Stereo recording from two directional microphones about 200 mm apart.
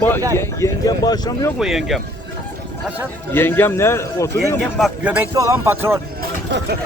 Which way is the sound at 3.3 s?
10° left (ahead or behind).